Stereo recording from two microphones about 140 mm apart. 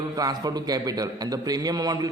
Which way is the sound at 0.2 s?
30° right (ahead or behind).